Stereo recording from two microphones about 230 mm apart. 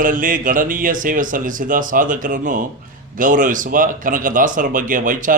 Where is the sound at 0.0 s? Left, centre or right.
Right.